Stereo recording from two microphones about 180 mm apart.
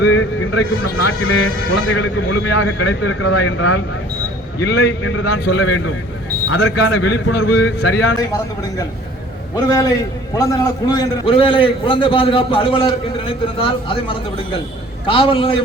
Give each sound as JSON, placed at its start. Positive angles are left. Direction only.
{"t": 0.0, "sound": "a man's voice", "side_deg": 90}
{"t": 10.3, "sound": "a man's voice", "side_deg": 20}